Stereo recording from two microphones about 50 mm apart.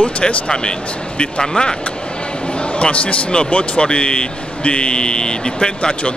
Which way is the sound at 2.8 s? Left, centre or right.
Left.